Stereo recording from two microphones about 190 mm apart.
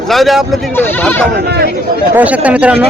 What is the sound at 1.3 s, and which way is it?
Speech, 60° right (ahead or behind).